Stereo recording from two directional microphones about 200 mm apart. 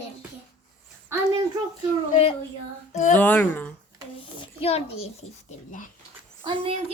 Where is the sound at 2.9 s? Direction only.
35° left (ahead or behind).